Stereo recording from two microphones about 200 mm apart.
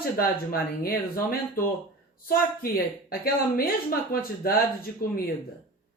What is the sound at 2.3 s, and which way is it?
Speech, 50° left (ahead or behind).